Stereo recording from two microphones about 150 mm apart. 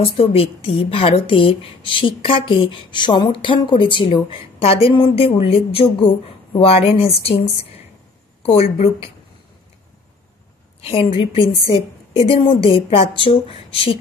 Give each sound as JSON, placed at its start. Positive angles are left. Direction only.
{"t": 0.0, "sound": "a woman's voice", "side_deg": 40}
{"t": 10.8, "sound": "a woman's voice", "side_deg": 40}